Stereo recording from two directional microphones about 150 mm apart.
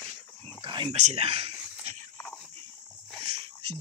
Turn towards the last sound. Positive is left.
turn(degrees=-40)  # may be behind; listen again after turning